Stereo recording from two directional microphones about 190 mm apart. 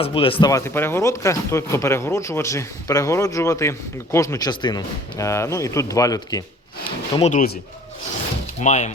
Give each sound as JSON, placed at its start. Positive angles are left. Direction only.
{"t": 0.0, "sound": "speech", "side_deg": 30}
{"t": 0.5, "sound": "speech", "side_deg": 10}
{"t": 7.2, "sound": "speech", "side_deg": 40}
{"t": 8.6, "sound": "speech", "side_deg": 40}